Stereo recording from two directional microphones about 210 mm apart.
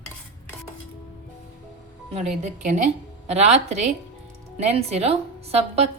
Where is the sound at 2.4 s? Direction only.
35° right (ahead or behind).